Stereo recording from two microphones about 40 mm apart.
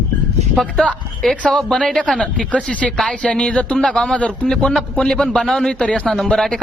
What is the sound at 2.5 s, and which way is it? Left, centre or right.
Speech, left.